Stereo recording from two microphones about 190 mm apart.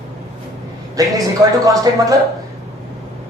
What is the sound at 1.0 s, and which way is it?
Speech, 20° right (ahead or behind).